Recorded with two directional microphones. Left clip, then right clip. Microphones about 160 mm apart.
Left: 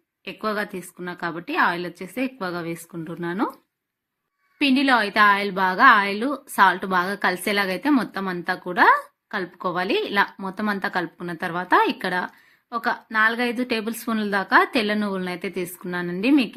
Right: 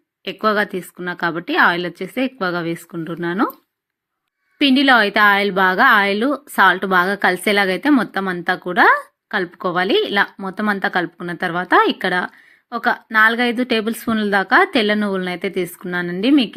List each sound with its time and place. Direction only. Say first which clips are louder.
0.3 s a woman's voice: right 9 dB; 30° right (ahead or behind)
4.5 s a woman's voice: right 6 dB; 25° right (ahead or behind)